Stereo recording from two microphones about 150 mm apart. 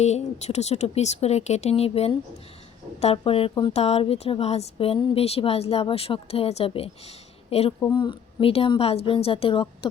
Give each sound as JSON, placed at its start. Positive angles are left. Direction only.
{"t": 0.0, "sound": "speech", "side_deg": 50}
{"t": 7.8, "sound": "speech", "side_deg": 30}